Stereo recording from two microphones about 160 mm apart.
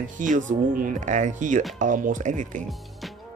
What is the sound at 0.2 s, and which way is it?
Speech, 55° right (ahead or behind).